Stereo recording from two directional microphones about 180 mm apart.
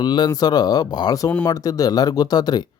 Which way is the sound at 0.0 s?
25° left (ahead or behind).